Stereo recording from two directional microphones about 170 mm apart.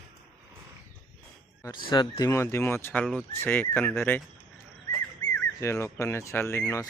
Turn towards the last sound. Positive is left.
turn(degrees=15)  # may be behind; listen again after turning